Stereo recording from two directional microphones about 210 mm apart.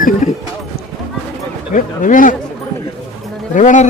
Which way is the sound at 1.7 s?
40° left (ahead or behind).